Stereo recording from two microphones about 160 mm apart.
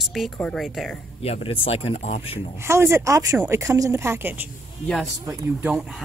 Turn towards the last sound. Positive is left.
turn(degrees=-15)  # may be behind; listen again after turning